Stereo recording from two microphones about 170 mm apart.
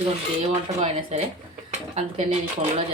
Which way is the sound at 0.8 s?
35° right (ahead or behind).